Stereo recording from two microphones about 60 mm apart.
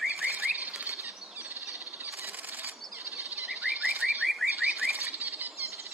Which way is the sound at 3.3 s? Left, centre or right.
Right.